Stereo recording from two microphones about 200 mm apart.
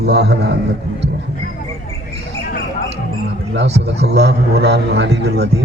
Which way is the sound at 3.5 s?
60° right (ahead or behind).